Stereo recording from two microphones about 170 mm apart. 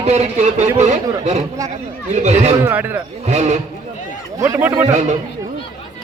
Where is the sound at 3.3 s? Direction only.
40° right (ahead or behind).